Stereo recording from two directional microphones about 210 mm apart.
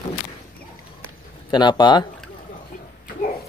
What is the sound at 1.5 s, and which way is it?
Speech, 20° left (ahead or behind).